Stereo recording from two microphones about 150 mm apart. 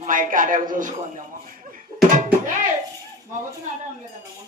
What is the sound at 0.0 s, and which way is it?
A man's voice, 60° right (ahead or behind).